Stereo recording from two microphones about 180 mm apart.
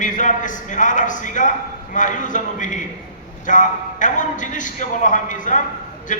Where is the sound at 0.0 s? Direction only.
45° left (ahead or behind).